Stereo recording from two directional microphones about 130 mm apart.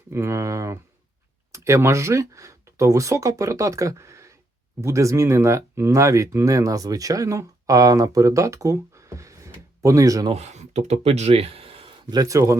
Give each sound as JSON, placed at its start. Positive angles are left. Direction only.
{"t": 0.1, "sound": "a sound", "side_deg": -20}
{"t": 1.5, "sound": "speech", "side_deg": -20}
{"t": 10.3, "sound": "speech", "side_deg": -60}
{"t": 12.1, "sound": "speech", "side_deg": -25}